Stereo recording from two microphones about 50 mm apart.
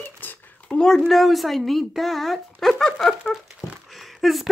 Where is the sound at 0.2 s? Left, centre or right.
Left.